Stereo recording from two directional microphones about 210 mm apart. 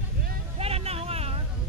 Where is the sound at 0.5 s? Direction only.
30° right (ahead or behind).